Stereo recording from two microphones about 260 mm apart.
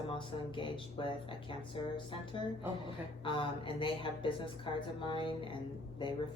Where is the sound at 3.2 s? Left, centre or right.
Centre.